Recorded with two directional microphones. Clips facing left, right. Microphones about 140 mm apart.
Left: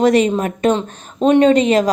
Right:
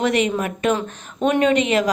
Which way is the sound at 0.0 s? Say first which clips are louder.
Left 6 dB; 35° left (ahead or behind).